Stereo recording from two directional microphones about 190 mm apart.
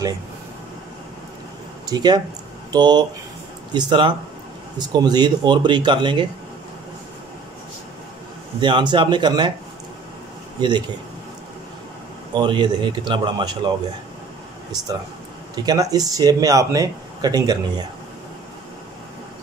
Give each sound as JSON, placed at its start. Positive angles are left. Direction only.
{"t": 1.9, "sound": "speech", "side_deg": -20}
{"t": 8.5, "sound": "speech", "side_deg": -25}
{"t": 12.4, "sound": "speech", "side_deg": -25}
{"t": 15.5, "sound": "speech", "side_deg": -20}